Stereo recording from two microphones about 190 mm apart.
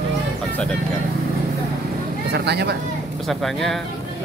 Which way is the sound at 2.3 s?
60° right (ahead or behind).